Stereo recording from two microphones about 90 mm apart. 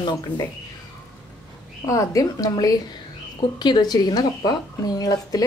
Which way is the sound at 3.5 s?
55° left (ahead or behind).